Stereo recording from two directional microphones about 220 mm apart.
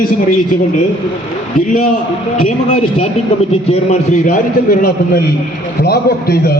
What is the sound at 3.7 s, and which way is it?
A man's voice, 35° left (ahead or behind).